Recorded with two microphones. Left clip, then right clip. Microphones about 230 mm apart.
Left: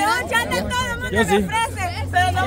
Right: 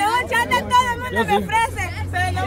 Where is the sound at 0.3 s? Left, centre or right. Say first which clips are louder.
Right 3 dB; centre.